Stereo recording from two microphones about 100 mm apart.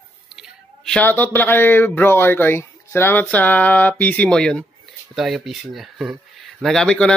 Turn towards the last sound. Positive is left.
turn(degrees=5)  # may be behind; listen again after turning